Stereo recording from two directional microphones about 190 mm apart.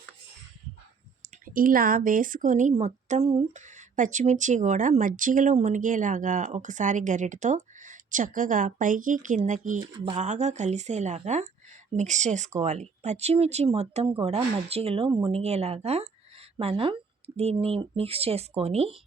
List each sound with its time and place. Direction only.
1.2 s speech: 45° right (ahead or behind)